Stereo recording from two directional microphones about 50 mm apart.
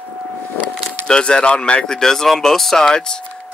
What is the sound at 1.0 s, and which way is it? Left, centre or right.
Speech, centre.